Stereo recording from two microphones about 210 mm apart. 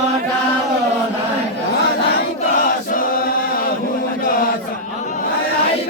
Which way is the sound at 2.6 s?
40° left (ahead or behind).